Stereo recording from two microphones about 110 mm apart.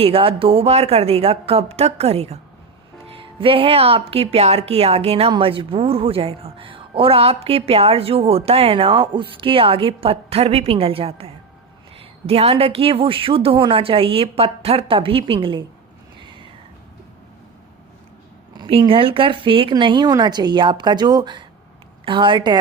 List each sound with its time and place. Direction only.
0.0 s a woman's voice: 60° right (ahead or behind)
3.2 s a woman's voice: 55° right (ahead or behind)
16.2 s a sound: 50° right (ahead or behind)
18.8 s a woman's voice: 55° right (ahead or behind)